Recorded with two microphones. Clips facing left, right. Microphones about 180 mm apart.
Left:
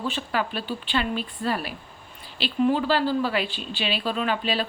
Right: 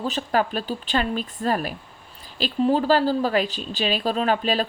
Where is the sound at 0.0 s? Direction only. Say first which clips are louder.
Right 4 dB; 40° right (ahead or behind).